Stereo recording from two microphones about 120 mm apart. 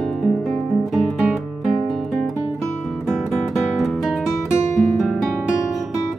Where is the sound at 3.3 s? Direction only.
Centre (ahead or behind).